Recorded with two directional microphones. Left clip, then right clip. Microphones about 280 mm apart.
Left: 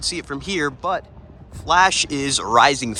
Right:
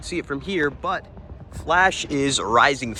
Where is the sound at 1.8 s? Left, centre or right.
Centre.